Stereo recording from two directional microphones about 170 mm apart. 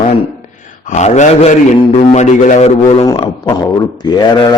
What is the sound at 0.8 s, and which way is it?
A man's voice, 45° left (ahead or behind).